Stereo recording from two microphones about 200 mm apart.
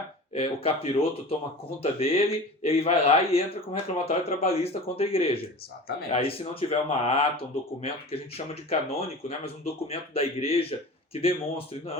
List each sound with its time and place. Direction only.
0.3 s speech: 30° left (ahead or behind)